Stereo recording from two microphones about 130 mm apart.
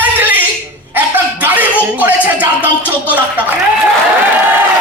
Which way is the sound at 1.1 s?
15° right (ahead or behind).